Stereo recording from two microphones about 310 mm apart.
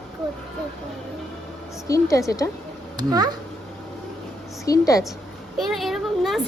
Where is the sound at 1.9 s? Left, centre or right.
Centre.